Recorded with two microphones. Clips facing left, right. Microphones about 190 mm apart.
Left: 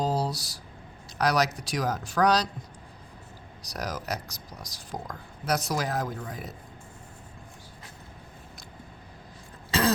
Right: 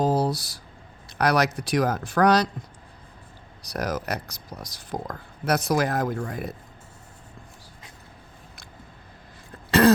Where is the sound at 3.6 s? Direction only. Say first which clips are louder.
Right 5 dB; 55° right (ahead or behind).